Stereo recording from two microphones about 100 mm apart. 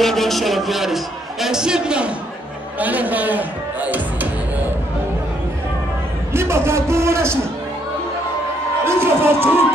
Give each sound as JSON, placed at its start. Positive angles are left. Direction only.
{"t": 0.0, "sound": "a man's voice", "side_deg": 0}
{"t": 6.3, "sound": "a man's voice", "side_deg": -25}
{"t": 8.8, "sound": "speech", "side_deg": -25}